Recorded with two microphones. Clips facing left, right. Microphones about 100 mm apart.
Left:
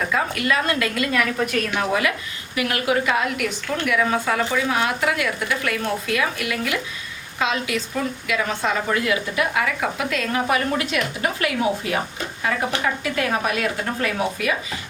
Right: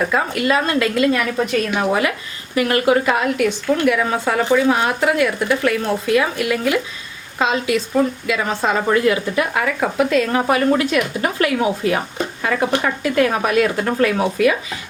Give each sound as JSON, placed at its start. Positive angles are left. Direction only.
{"t": 0.1, "sound": "a woman's voice", "side_deg": -30}
{"t": 2.6, "sound": "speech", "side_deg": -40}